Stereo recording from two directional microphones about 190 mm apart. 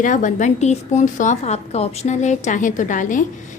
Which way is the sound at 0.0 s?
40° left (ahead or behind).